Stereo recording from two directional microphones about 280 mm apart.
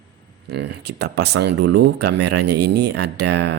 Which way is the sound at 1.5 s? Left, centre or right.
Right.